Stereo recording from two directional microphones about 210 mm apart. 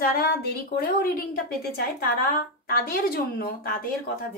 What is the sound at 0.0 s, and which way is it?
A woman's voice, 45° left (ahead or behind).